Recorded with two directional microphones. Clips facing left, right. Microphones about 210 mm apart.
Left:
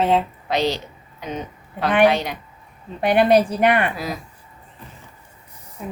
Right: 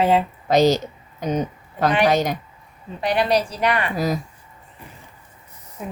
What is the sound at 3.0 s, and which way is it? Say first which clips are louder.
Speech: left 5 dB; 55° left (ahead or behind).